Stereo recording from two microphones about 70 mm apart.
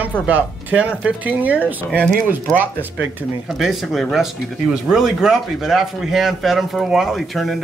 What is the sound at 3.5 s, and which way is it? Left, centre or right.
Speech, centre.